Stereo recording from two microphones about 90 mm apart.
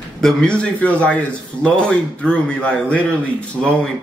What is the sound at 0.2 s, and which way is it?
A man's voice, 10° left (ahead or behind).